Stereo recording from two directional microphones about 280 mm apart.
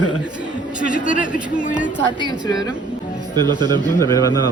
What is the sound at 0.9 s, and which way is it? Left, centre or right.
Speech, left.